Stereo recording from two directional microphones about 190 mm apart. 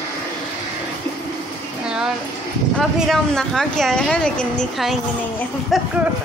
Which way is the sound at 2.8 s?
Centre (ahead or behind).